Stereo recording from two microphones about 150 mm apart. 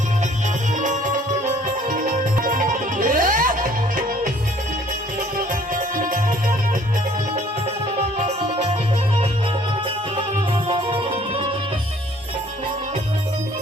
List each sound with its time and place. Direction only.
1.9 s music: 60° right (ahead or behind)
5.7 s music: 65° right (ahead or behind)
8.2 s music: 50° right (ahead or behind)
10.7 s music: 35° right (ahead or behind)